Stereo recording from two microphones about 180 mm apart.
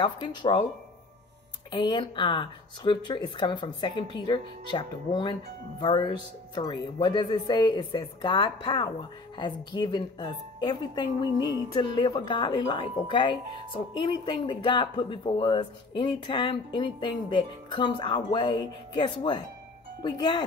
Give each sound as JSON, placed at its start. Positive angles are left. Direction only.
{"t": 0.0, "sound": "speech", "side_deg": 25}
{"t": 1.7, "sound": "speech", "side_deg": 25}